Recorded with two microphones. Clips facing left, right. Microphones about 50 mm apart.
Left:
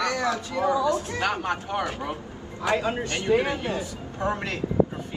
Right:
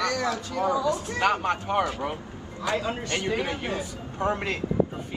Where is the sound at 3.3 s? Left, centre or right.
Left.